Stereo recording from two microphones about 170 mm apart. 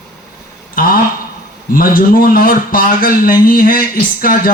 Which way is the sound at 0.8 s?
55° left (ahead or behind).